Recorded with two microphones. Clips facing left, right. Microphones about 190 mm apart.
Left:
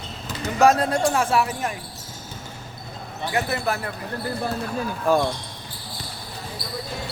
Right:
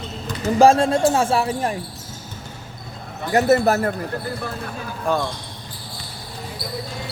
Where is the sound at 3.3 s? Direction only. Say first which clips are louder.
Right 9 dB; 40° right (ahead or behind).